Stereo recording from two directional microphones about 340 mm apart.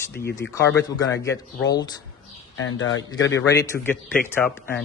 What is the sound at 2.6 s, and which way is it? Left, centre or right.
Speech, left.